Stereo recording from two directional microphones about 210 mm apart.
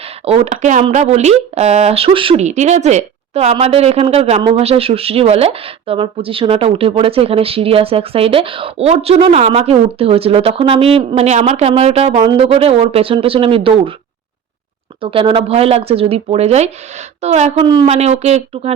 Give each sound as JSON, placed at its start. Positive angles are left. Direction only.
{"t": 0.3, "sound": "speech", "side_deg": -30}
{"t": 15.0, "sound": "speech", "side_deg": -25}